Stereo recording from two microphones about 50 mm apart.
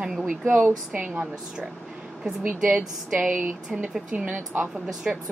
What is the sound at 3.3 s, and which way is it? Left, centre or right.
Speech, right.